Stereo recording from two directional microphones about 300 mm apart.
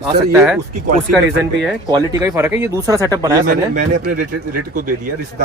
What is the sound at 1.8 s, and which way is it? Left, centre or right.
A man's voice, centre.